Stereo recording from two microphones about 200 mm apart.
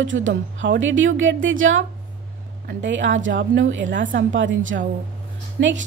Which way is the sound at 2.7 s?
60° right (ahead or behind).